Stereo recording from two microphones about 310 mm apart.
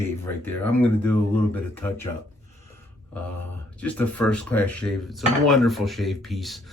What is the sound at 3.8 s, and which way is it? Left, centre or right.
Speech, centre.